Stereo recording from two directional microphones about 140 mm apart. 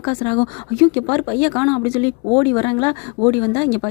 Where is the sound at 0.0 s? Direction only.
30° left (ahead or behind).